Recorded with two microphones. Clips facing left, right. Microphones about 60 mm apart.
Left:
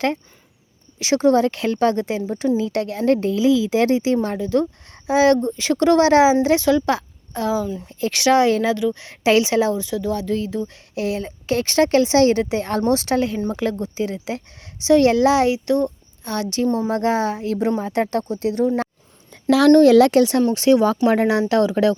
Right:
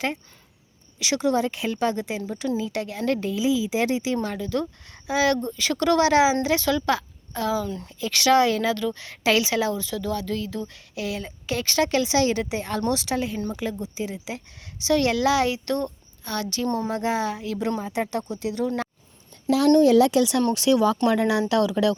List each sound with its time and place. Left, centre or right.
0.9 s a woman's voice: left
4.4 s a woman's voice: left
7.6 s speech: centre
7.9 s a woman's voice: left
13.1 s a woman's voice: left
15.5 s a woman's voice: centre; by 18.7 s left
19.5 s a woman's voice: left
19.7 s speech: left
20.1 s a woman's voice: left